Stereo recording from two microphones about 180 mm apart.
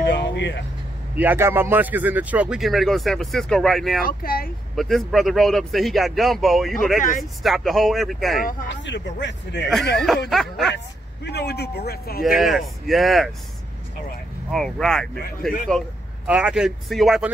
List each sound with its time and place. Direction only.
0.0 s vehicle: 75° left (ahead or behind)
1.1 s a man's voice: 10° right (ahead or behind)
4.0 s speech: 55° left (ahead or behind)
4.7 s a man's voice: centre (ahead or behind)
7.0 s speech: 45° left (ahead or behind)
7.4 s a man's voice: centre (ahead or behind)
8.6 s speech: 80° left
10.3 s a man's voice: centre (ahead or behind)
11.2 s speech: 65° left (ahead or behind)
12.2 s a man's voice: centre (ahead or behind)
14.5 s a man's voice: centre (ahead or behind)